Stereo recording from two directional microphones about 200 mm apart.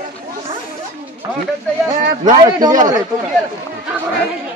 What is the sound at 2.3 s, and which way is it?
Speech, 20° right (ahead or behind).